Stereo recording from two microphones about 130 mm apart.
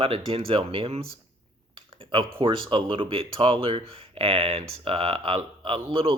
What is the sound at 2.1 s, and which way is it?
Speech, 40° right (ahead or behind).